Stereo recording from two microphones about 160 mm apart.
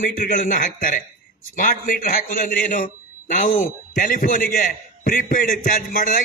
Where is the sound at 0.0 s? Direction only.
55° left (ahead or behind).